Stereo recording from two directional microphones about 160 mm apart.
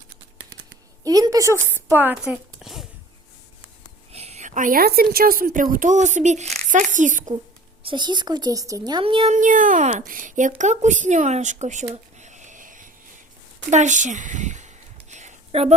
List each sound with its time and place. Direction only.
1.0 s a woman's voice: 20° right (ahead or behind); by 2.8 s 5° right (ahead or behind)
4.1 s a woman's voice: 40° right (ahead or behind)
7.8 s speech: 30° right (ahead or behind)
9.3 s a woman's voice: 55° right (ahead or behind)
10.6 s a sound: 50° right (ahead or behind)